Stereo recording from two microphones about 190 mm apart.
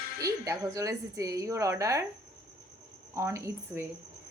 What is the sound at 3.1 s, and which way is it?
Speech, 15° right (ahead or behind).